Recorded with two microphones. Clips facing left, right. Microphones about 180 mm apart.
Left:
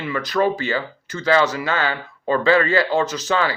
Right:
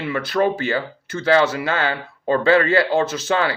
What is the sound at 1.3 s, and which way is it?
Speech, 55° right (ahead or behind).